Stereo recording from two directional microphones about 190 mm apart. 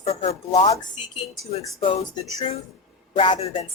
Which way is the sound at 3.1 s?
30° left (ahead or behind).